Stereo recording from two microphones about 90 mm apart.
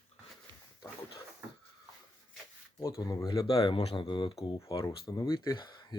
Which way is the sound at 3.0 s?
45° left (ahead or behind).